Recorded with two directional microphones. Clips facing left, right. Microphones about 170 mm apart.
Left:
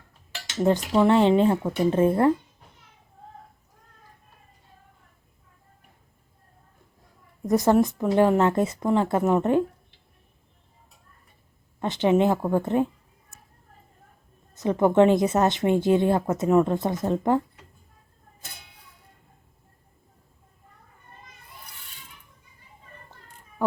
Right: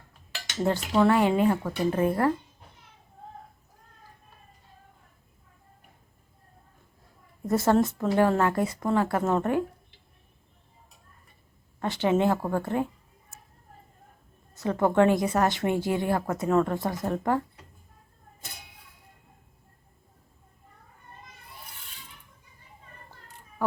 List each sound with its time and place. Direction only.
0.9 s speech: 25° left (ahead or behind)
7.4 s speech: 15° left (ahead or behind)
11.8 s speech: 20° left (ahead or behind)
14.5 s speech: 20° left (ahead or behind)